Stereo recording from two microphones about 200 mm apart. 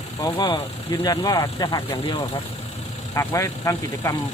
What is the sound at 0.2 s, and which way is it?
Speech, 20° left (ahead or behind).